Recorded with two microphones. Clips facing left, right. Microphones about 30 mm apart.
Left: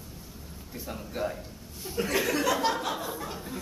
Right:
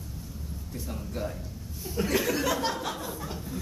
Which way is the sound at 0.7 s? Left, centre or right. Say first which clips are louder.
Left 1 dB; centre.